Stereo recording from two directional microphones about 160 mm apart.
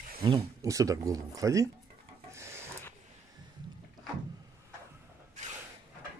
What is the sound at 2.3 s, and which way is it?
Filing, 15° right (ahead or behind).